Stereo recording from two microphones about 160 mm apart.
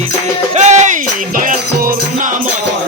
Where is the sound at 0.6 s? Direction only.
45° right (ahead or behind).